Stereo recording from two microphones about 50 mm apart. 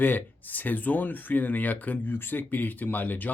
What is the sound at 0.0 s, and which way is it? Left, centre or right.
Speech, left.